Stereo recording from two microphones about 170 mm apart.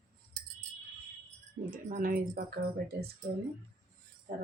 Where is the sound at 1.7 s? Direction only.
55° right (ahead or behind).